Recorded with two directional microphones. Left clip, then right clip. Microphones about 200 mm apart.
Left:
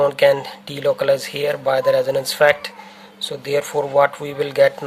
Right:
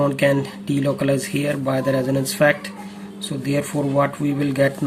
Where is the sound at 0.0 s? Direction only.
40° left (ahead or behind).